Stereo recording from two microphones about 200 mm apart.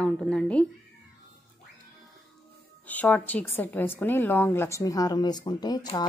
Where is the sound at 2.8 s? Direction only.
5° left (ahead or behind).